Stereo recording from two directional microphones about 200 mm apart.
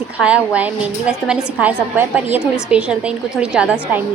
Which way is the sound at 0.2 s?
5° right (ahead or behind).